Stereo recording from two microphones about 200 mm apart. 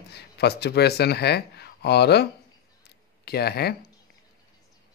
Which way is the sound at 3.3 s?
50° left (ahead or behind).